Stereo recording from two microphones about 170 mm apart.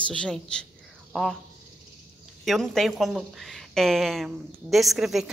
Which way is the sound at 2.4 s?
Centre (ahead or behind).